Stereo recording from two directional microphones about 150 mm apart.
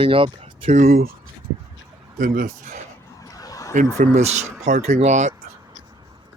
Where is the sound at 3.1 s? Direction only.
25° left (ahead or behind).